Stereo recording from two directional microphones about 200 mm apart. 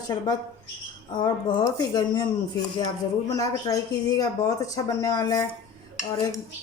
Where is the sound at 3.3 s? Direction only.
15° left (ahead or behind).